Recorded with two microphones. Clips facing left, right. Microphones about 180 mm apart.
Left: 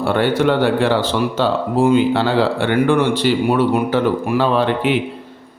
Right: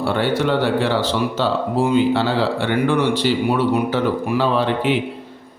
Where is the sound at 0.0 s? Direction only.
55° left (ahead or behind).